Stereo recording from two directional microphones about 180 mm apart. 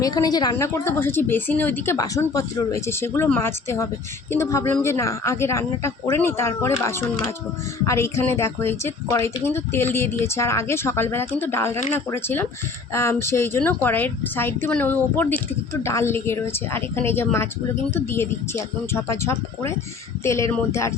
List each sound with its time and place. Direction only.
0.0 s a woman's voice: 20° left (ahead or behind)
7.9 s a woman's voice: 15° left (ahead or behind)